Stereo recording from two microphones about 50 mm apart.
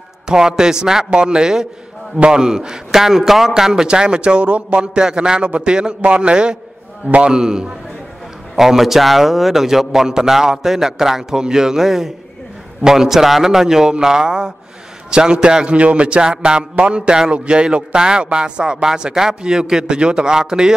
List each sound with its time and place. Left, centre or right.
0.3 s a man's voice: centre